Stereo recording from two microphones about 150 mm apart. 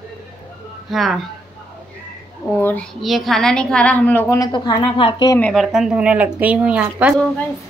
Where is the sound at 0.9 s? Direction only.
Centre (ahead or behind).